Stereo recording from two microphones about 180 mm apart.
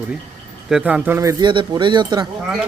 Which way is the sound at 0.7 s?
10° right (ahead or behind).